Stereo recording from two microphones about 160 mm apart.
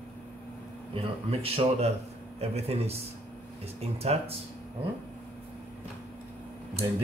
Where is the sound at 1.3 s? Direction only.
40° right (ahead or behind).